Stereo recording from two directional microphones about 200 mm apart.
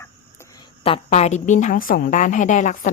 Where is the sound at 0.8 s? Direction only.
30° left (ahead or behind).